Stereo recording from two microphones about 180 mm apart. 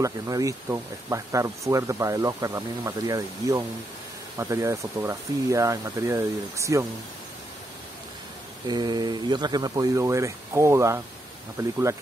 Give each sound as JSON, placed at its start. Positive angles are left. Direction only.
{"t": 0.0, "sound": "speech", "side_deg": -20}
{"t": 8.6, "sound": "speech", "side_deg": -25}